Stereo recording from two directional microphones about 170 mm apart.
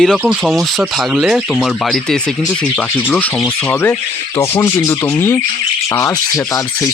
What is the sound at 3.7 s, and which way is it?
Speech, 10° left (ahead or behind).